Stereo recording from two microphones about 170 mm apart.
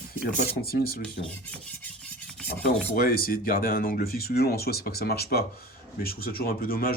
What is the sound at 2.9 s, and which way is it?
Speech, 60° left (ahead or behind).